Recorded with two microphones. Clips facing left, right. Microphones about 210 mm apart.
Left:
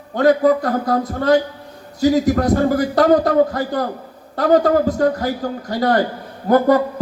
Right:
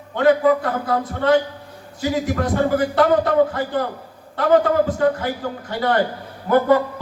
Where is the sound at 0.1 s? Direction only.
40° left (ahead or behind).